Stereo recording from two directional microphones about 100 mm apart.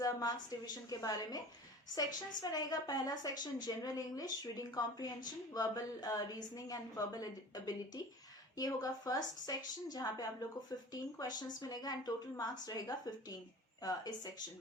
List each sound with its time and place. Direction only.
0.0 s a woman's voice: 40° left (ahead or behind)